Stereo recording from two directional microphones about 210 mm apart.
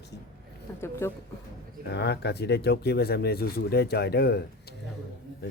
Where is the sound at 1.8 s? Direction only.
55° left (ahead or behind).